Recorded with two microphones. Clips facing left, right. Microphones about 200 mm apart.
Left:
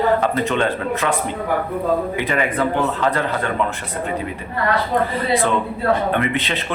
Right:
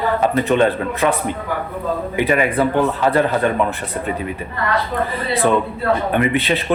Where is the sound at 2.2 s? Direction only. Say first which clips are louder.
Right 4 dB; 15° right (ahead or behind).